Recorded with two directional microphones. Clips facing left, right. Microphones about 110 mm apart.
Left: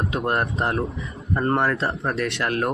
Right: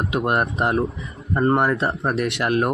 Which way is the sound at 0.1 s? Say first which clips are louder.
Right 5 dB; 15° right (ahead or behind).